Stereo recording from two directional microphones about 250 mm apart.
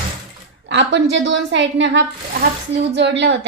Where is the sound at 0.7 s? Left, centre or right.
Right.